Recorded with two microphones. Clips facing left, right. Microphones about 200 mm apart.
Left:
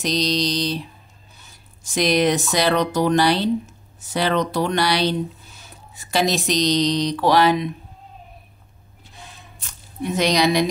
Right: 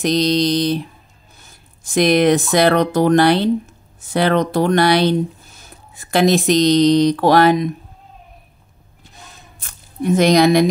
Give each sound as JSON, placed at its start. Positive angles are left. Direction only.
{"t": 0.0, "sound": "mantra", "side_deg": -55}
{"t": 1.4, "sound": "speech", "side_deg": -55}
{"t": 9.1, "sound": "squish", "side_deg": -45}